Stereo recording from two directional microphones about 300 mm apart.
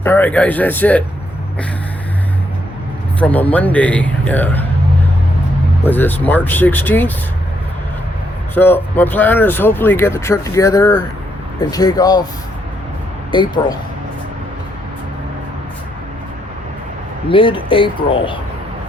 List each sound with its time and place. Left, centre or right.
0.0 s speech: centre
3.2 s speech: centre
5.8 s speech: centre
8.5 s speech: centre
13.3 s speech: centre
17.2 s speech: centre